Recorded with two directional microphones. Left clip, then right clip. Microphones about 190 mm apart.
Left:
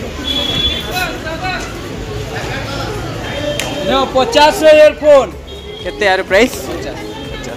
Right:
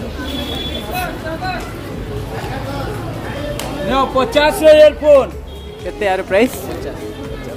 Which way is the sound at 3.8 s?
25° right (ahead or behind).